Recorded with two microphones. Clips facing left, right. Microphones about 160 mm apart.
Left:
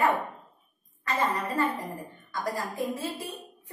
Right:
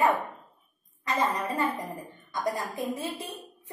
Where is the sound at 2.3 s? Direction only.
20° right (ahead or behind).